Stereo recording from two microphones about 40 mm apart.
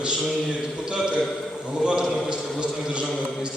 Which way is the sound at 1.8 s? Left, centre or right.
Right.